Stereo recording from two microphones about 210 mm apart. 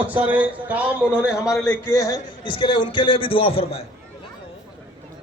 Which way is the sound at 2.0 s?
20° left (ahead or behind).